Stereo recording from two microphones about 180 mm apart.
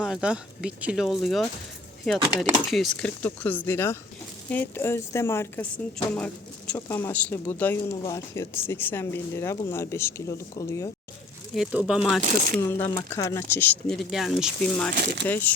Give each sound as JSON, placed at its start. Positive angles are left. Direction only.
{"t": 0.0, "sound": "speech", "side_deg": -5}
{"t": 2.6, "sound": "speech", "side_deg": 0}
{"t": 11.5, "sound": "speech", "side_deg": -5}
{"t": 12.6, "sound": "speech", "side_deg": 15}
{"t": 14.9, "sound": "speech", "side_deg": -70}
{"t": 15.3, "sound": "speech", "side_deg": 10}